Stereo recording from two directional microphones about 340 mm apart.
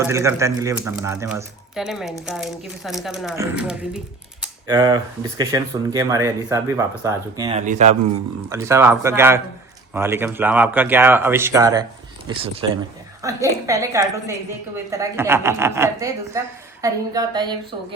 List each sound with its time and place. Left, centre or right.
0.0 s speech: centre
8.4 s speech: centre